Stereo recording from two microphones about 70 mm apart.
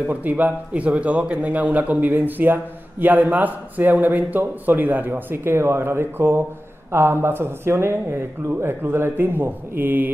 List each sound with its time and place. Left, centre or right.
0.1 s speech: right